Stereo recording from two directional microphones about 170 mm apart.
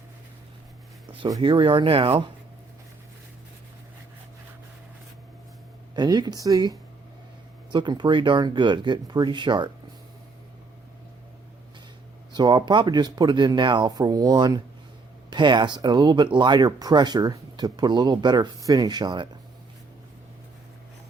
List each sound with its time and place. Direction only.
1.2 s speech: 30° right (ahead or behind)
6.0 s speech: 25° right (ahead or behind)
12.3 s speech: 25° right (ahead or behind)